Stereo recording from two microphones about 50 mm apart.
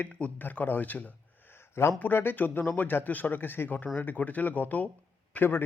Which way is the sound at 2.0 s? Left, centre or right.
Left.